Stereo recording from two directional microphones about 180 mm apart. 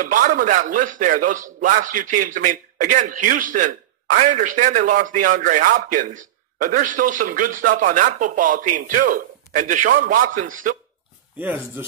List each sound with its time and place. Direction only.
0.0 s a man's voice: 50° right (ahead or behind)
11.3 s speech: 10° right (ahead or behind)